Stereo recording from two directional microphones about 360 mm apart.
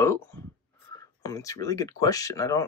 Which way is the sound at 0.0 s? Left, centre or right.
Centre.